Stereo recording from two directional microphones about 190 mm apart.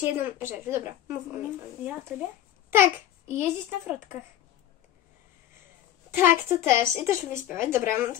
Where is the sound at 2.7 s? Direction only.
10° right (ahead or behind).